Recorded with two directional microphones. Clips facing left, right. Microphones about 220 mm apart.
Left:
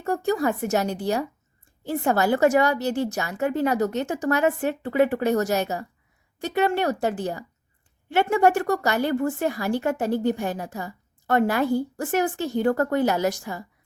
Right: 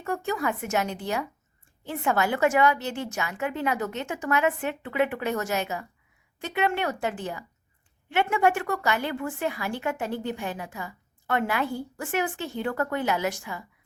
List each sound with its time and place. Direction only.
0.0 s a woman's voice: 35° left (ahead or behind)